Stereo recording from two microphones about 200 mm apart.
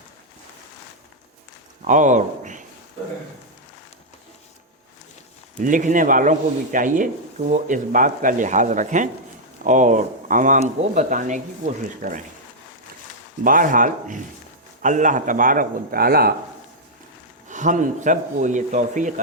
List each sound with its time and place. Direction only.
1.8 s a man's voice: 40° right (ahead or behind)
5.5 s speech: 40° right (ahead or behind)
13.4 s speech: 45° right (ahead or behind)
17.5 s speech: 40° right (ahead or behind)